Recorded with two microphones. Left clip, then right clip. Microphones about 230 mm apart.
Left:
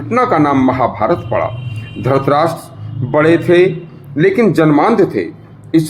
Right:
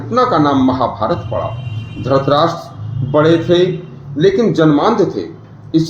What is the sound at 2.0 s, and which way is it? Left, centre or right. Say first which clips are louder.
Speech: even; left.